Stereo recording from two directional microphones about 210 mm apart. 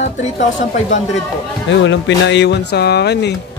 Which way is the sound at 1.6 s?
60° left (ahead or behind).